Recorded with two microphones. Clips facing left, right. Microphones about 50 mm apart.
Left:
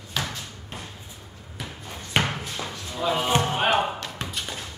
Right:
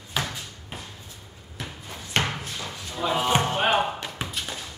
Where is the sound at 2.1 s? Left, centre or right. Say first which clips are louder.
Left 1 dB; centre.